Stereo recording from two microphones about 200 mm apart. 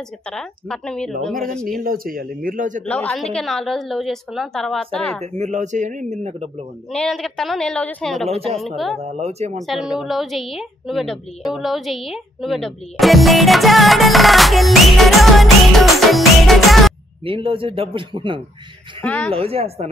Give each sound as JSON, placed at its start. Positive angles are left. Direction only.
{"t": 0.3, "sound": "a woman's voice", "side_deg": 5}
{"t": 1.8, "sound": "speech", "side_deg": -45}
{"t": 2.8, "sound": "a woman's voice", "side_deg": 5}
{"t": 5.2, "sound": "speech", "side_deg": -35}
{"t": 6.9, "sound": "a woman's voice", "side_deg": 5}
{"t": 8.3, "sound": "a man's voice", "side_deg": -30}
{"t": 8.5, "sound": "a woman's voice", "side_deg": 0}
{"t": 9.0, "sound": "speech", "side_deg": -35}
{"t": 9.6, "sound": "a woman's voice", "side_deg": 0}
{"t": 17.2, "sound": "a man's voice", "side_deg": -25}
{"t": 18.9, "sound": "speech", "side_deg": 5}
{"t": 19.3, "sound": "a man's voice", "side_deg": -30}